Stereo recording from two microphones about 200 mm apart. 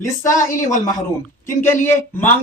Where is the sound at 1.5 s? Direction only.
15° left (ahead or behind).